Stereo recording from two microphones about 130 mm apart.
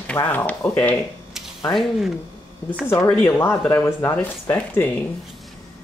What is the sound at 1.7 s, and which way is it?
Speech, centre (ahead or behind).